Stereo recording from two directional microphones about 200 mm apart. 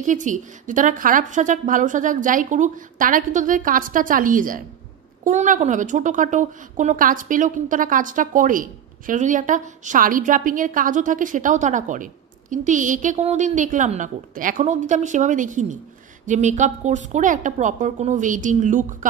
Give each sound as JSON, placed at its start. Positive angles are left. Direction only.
{"t": 0.0, "sound": "a woman's voice", "side_deg": -40}